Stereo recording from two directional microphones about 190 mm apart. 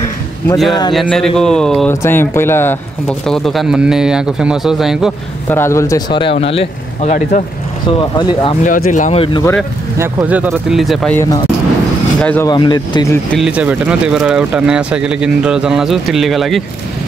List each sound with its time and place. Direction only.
0.9 s speech: 5° left (ahead or behind)
5.5 s speech: 15° left (ahead or behind); by 7.4 s 40° left (ahead or behind)
8.0 s speech: 20° left (ahead or behind)
8.6 s speech: 40° left (ahead or behind)
9.2 s speech: 25° left (ahead or behind)
9.9 s speech: 10° right (ahead or behind)
11.1 s speech: 20° left (ahead or behind)
12.2 s speech: 10° left (ahead or behind)
12.4 s speech: 20° left (ahead or behind)
13.3 s speech: 5° right (ahead or behind)